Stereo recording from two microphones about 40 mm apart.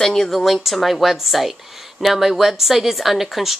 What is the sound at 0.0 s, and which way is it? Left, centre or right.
Speech, centre.